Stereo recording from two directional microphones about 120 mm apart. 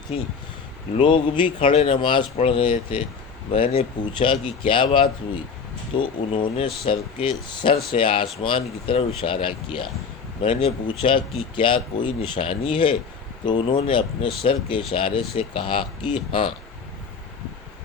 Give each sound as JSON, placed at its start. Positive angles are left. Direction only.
{"t": 0.1, "sound": "speech", "side_deg": 55}
{"t": 0.9, "sound": "speech", "side_deg": 45}